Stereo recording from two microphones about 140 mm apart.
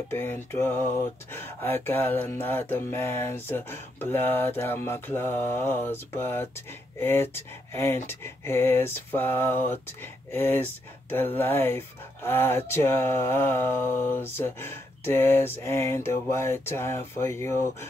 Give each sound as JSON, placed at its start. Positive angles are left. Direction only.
{"t": 0.1, "sound": "speech", "side_deg": 15}